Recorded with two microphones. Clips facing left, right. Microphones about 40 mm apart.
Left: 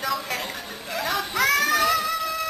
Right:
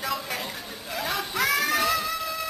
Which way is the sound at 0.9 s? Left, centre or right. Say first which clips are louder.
Left 3 dB; centre.